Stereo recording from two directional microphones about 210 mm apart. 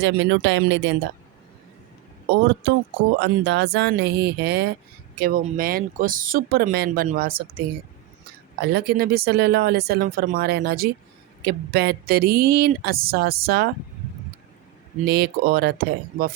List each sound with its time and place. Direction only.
0.0 s speech: 55° right (ahead or behind)
3.2 s speech: 55° right (ahead or behind)
8.6 s speech: 50° right (ahead or behind)
15.0 s speech: 50° right (ahead or behind)